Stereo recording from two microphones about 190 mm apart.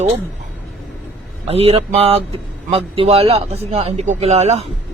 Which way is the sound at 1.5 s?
30° right (ahead or behind).